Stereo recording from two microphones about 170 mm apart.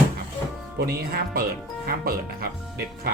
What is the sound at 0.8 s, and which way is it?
Speech, 65° right (ahead or behind).